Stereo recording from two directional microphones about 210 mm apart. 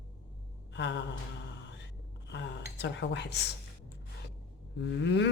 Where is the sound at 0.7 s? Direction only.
55° left (ahead or behind).